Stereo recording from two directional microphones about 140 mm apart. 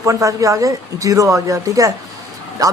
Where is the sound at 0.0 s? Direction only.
25° right (ahead or behind).